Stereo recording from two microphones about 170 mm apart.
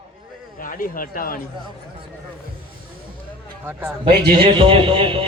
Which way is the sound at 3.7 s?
10° right (ahead or behind).